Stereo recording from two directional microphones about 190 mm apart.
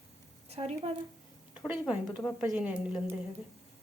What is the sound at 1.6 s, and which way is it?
Speech, 5° right (ahead or behind).